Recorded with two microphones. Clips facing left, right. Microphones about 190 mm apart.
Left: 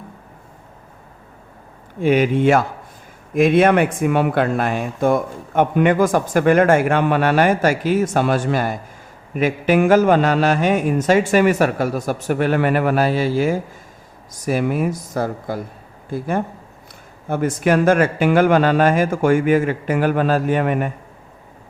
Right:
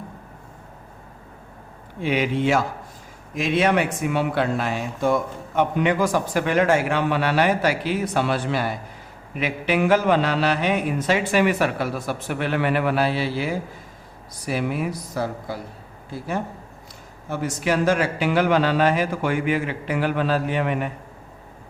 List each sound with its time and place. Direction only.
2.0 s speech: 50° left (ahead or behind)